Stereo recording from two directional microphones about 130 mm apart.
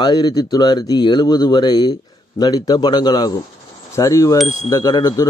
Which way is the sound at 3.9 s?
25° left (ahead or behind).